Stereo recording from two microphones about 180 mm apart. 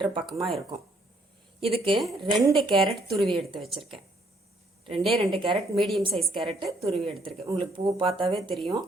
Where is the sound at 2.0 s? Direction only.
Centre (ahead or behind).